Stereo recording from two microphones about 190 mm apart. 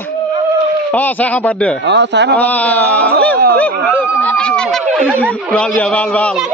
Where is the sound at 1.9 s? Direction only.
65° right (ahead or behind).